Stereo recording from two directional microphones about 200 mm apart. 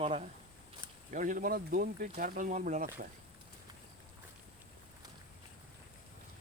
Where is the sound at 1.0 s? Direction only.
40° right (ahead or behind).